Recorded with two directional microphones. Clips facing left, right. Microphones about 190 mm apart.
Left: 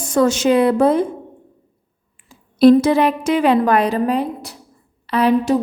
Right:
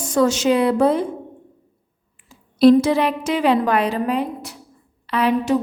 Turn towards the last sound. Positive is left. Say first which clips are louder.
# left 3 dB
turn(degrees=40)  # may be behind; listen again after turning